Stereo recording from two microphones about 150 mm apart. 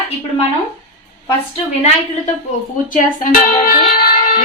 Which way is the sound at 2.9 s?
60° left (ahead or behind).